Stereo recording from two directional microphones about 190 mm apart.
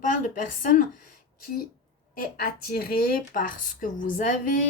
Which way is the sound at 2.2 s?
50° left (ahead or behind).